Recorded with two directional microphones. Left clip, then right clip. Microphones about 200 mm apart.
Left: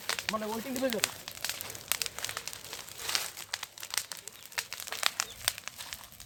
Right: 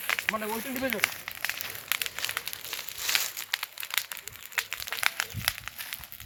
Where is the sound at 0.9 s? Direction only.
30° left (ahead or behind).